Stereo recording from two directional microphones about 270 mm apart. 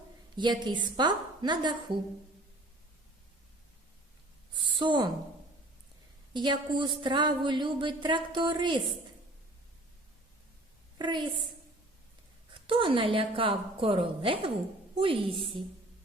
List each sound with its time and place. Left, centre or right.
0.3 s speech: centre
4.8 s speech: centre
6.3 s speech: centre
10.9 s a woman's voice: centre
12.6 s a woman's voice: centre